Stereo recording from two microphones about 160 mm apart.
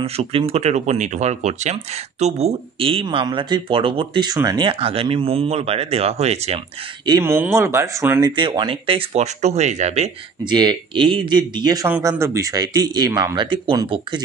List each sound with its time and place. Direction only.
0.0 s speech: 35° right (ahead or behind)
7.1 s speech: 15° right (ahead or behind)
8.3 s speech: 30° right (ahead or behind)
10.4 s speech: 25° right (ahead or behind)